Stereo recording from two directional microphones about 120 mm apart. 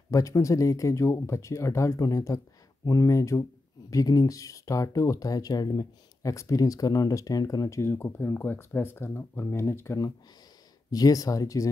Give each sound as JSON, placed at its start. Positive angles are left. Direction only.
{"t": 0.1, "sound": "speech", "side_deg": 25}